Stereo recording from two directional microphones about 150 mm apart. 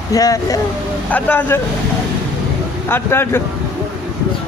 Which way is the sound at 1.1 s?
10° left (ahead or behind).